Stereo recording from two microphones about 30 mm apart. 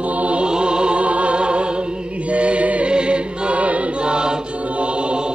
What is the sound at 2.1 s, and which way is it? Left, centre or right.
Chant, right.